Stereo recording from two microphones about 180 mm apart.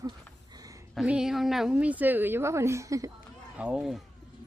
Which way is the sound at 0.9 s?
5° right (ahead or behind).